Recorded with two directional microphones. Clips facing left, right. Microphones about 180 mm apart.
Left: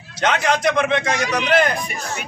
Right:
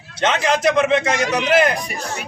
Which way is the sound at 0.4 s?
5° right (ahead or behind).